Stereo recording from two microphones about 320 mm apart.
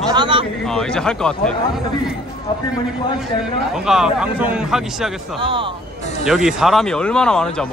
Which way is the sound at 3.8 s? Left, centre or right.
Centre.